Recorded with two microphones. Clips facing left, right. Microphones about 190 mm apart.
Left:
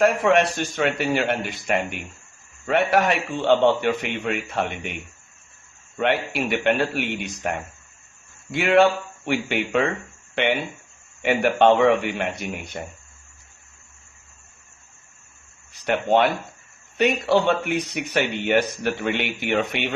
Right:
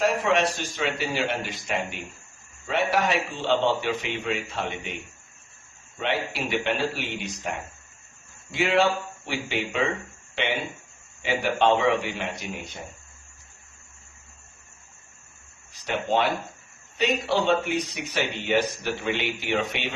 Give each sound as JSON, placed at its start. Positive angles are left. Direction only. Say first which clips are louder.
{"t": 0.0, "sound": "speech", "louder": "left 5 dB", "side_deg": 55}
{"t": 6.0, "sound": "speech", "louder": "left 5 dB", "side_deg": 55}
{"t": 8.5, "sound": "speech", "louder": "left 5 dB", "side_deg": 55}
{"t": 15.8, "sound": "speech", "louder": "left 5 dB", "side_deg": 60}